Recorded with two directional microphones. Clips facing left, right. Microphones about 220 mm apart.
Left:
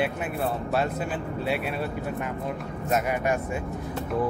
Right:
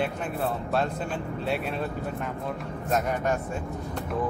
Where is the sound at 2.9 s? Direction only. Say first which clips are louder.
Left 1 dB; 10° left (ahead or behind).